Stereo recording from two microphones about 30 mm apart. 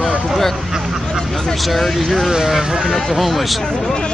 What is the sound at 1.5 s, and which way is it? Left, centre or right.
Speech, centre.